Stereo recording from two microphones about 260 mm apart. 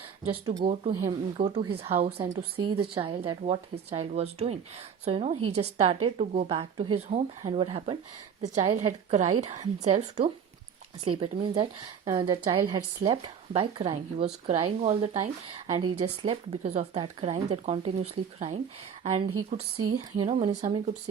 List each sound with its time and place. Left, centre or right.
0.4 s a woman's voice: right
19.5 s speech: right
20.0 s a woman's voice: right